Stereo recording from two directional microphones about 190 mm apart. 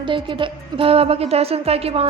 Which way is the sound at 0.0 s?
25° right (ahead or behind).